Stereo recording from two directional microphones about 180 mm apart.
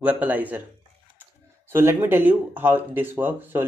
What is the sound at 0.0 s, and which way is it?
Speech, 10° right (ahead or behind).